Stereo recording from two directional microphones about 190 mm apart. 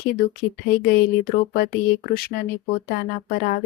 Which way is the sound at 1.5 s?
50° left (ahead or behind).